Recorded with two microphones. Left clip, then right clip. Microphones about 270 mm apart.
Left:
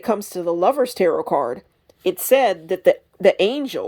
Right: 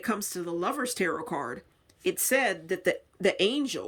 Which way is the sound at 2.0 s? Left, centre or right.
Centre.